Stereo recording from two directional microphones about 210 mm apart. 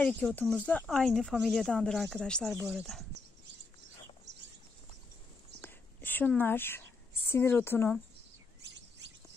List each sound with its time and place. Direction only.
0.0 s speech: 5° left (ahead or behind)
4.3 s a sound: 55° right (ahead or behind)
5.6 s whispering: 10° left (ahead or behind)
7.2 s speech: 10° left (ahead or behind)